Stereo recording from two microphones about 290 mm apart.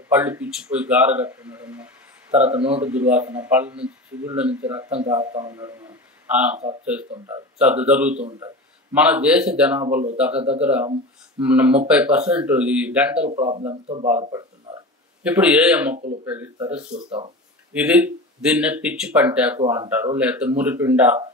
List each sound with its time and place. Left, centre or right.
0.1 s a man's voice: centre
13.3 s speech: right
14.2 s a sound: centre
15.2 s a man's voice: centre
16.9 s speech: centre
17.7 s a man's voice: centre
19.6 s speech: centre
20.2 s a man's voice: centre